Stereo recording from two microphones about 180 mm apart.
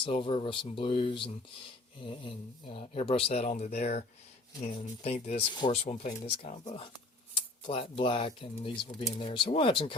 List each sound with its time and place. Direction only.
0.0 s speech: 30° left (ahead or behind)